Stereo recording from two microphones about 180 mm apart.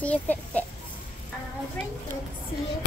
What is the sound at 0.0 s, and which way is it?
Speech, 10° left (ahead or behind).